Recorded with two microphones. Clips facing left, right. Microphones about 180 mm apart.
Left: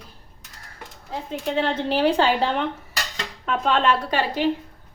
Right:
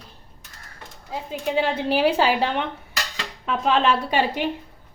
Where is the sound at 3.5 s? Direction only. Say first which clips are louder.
Even; 5° right (ahead or behind).